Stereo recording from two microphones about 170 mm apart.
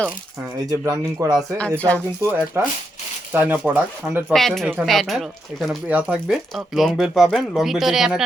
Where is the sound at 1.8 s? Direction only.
10° left (ahead or behind).